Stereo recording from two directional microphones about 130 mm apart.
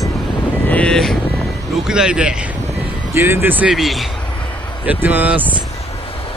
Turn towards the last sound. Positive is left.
turn(degrees=-15)  # may be behind; listen again after turning